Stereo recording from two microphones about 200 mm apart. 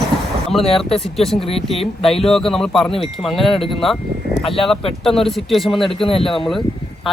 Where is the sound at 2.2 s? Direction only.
Centre (ahead or behind).